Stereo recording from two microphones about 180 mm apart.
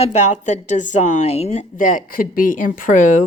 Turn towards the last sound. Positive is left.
turn(degrees=45)  # may be behind; listen again after turning